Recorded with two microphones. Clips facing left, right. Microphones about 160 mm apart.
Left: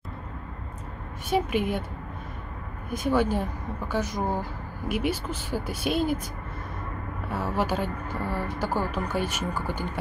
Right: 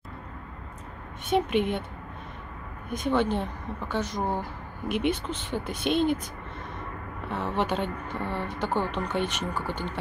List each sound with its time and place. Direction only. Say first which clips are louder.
1.3 s speech: right 1 dB; 5° left (ahead or behind)
2.9 s a woman's voice: left 1 dB; 5° left (ahead or behind)
7.2 s a woman's voice: even; 10° left (ahead or behind)